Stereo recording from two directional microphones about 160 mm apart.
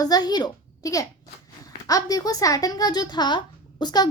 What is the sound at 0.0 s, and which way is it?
A woman's voice, 25° left (ahead or behind).